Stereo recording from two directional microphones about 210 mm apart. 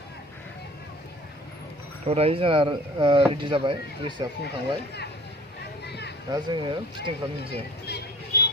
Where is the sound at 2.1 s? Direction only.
30° right (ahead or behind).